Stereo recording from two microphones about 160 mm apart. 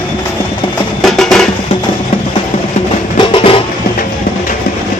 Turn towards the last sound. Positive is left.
turn(degrees=35)  # may be behind; listen again after turning